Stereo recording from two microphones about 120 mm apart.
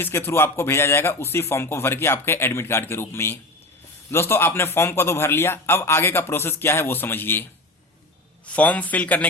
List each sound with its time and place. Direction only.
0.0 s speech: 20° left (ahead or behind)
8.4 s a man's voice: 10° left (ahead or behind)